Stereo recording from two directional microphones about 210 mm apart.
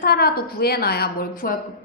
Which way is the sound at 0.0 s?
45° left (ahead or behind).